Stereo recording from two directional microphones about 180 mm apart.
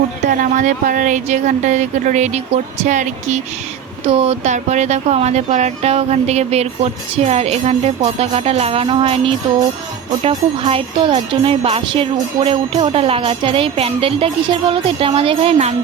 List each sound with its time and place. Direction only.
0.3 s jingle bell: 45° right (ahead or behind)